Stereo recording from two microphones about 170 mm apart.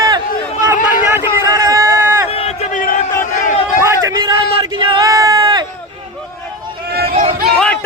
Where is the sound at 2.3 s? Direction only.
40° left (ahead or behind).